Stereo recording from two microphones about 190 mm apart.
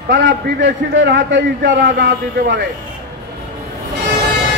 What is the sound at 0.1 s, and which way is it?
A man's voice, 70° right (ahead or behind).